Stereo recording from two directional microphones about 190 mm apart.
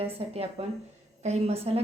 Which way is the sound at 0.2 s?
30° right (ahead or behind).